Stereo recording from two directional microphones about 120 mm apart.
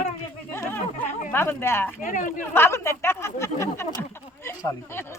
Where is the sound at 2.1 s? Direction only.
90° left.